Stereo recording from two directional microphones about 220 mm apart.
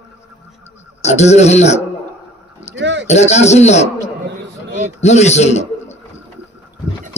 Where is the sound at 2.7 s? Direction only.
55° right (ahead or behind).